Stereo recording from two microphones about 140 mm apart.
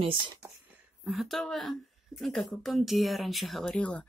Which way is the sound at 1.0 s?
Centre (ahead or behind).